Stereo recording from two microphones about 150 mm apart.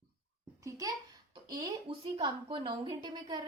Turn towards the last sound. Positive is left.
turn(degrees=-30)  # may be behind; listen again after turning